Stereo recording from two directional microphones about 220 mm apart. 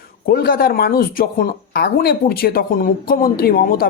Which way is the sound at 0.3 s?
45° left (ahead or behind).